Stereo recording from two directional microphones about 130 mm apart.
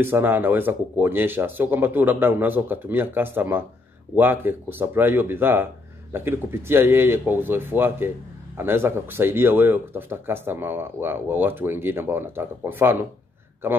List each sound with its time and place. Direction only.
0.0 s speech: 15° right (ahead or behind)